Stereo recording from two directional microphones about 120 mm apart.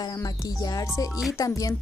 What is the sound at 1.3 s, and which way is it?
Speech, 30° left (ahead or behind).